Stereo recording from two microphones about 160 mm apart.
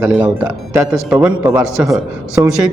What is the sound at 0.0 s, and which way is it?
A man's voice, 10° right (ahead or behind).